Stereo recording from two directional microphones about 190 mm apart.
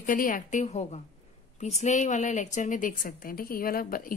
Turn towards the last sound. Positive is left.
turn(degrees=50)  # may be behind; listen again after turning